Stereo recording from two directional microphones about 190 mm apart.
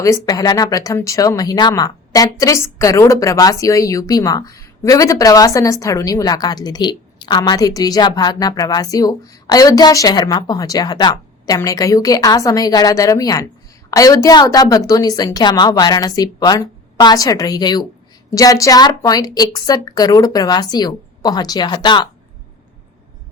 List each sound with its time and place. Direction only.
0.0 s speech: 20° left (ahead or behind)